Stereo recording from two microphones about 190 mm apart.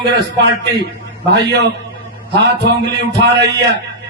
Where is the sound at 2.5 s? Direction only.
65° right (ahead or behind).